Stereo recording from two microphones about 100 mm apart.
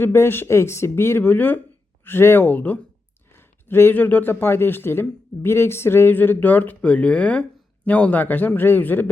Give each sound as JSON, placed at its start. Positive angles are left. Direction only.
{"t": 0.0, "sound": "a man's voice", "side_deg": 25}